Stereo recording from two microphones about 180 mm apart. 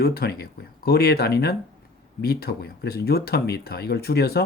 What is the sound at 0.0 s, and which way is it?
Speech, 60° left (ahead or behind).